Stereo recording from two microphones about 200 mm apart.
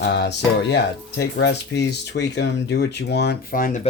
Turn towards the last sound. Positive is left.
turn(degrees=40)  # may be behind; listen again after turning